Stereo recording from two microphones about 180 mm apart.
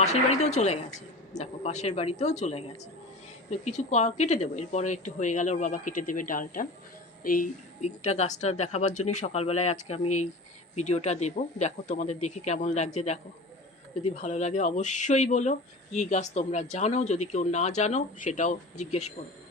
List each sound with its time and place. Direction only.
0.0 s speech: 40° left (ahead or behind)